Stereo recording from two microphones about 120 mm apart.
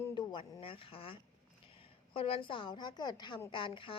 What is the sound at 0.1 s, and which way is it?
A woman's voice, 40° left (ahead or behind).